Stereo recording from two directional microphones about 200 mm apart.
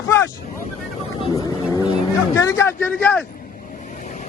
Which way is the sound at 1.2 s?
20° left (ahead or behind).